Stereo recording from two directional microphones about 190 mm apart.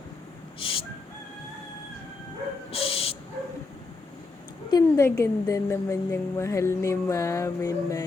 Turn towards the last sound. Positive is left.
turn(degrees=15)  # may be behind; listen again after turning